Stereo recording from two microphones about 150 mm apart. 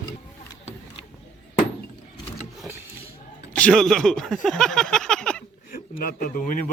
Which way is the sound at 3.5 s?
5° left (ahead or behind).